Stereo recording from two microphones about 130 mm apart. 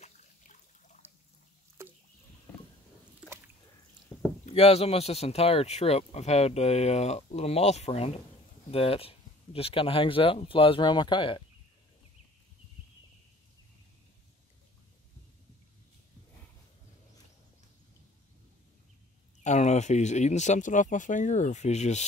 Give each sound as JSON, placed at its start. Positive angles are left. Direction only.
{"t": 0.0, "sound": "trickle", "side_deg": 65}
{"t": 4.5, "sound": "speech", "side_deg": 55}
{"t": 19.4, "sound": "speech", "side_deg": 60}